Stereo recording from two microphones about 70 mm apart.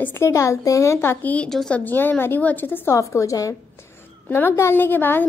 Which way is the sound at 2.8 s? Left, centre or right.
Left.